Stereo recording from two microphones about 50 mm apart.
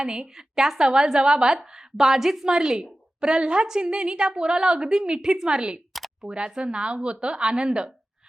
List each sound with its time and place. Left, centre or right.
0.0 s a woman's voice: centre